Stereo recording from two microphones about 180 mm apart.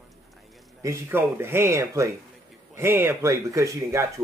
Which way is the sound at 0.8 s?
15° right (ahead or behind).